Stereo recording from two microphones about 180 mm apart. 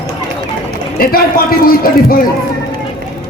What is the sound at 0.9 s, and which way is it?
A man's voice, 55° left (ahead or behind).